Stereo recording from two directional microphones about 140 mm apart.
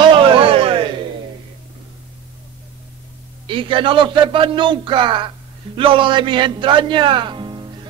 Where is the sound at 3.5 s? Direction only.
35° right (ahead or behind).